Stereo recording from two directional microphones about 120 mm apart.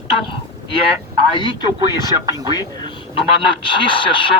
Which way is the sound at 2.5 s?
35° left (ahead or behind).